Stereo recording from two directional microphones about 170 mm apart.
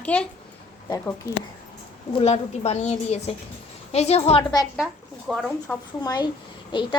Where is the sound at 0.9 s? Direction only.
20° left (ahead or behind).